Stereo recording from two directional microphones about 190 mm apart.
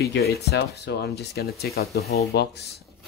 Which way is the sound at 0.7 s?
60° left (ahead or behind).